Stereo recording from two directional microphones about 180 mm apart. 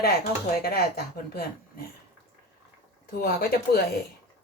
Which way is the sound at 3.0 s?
60° left (ahead or behind).